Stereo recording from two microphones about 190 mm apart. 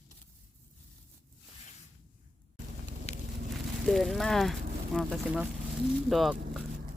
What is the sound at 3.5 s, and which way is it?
Speech, centre (ahead or behind).